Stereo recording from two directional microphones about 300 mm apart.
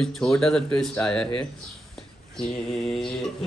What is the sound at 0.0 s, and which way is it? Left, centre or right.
A man's voice, centre.